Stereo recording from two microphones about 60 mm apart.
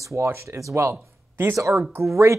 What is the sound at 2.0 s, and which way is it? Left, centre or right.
Speech, right.